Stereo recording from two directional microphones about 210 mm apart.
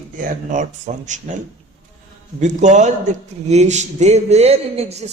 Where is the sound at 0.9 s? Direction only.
35° right (ahead or behind).